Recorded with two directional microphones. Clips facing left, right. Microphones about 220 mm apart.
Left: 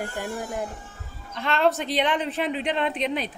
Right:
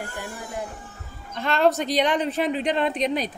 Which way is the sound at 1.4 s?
40° right (ahead or behind).